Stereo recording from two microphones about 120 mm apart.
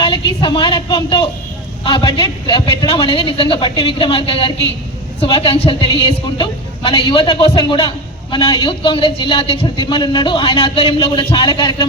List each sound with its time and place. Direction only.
0.0 s a woman's voice: 45° left (ahead or behind)